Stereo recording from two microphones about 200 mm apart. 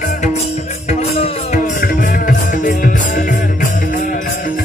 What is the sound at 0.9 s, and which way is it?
Music, 30° left (ahead or behind).